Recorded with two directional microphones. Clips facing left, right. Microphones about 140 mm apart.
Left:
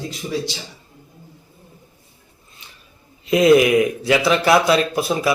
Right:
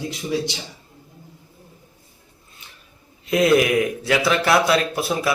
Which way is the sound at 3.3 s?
Centre (ahead or behind).